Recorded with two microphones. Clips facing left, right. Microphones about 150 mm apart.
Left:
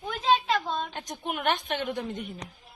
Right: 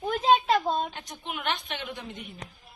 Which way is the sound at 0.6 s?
35° right (ahead or behind).